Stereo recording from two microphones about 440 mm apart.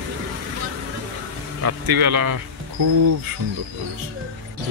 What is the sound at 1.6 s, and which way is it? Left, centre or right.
Speech, right.